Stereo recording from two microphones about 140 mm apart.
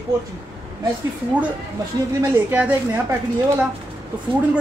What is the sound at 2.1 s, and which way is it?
Speech, 20° right (ahead or behind).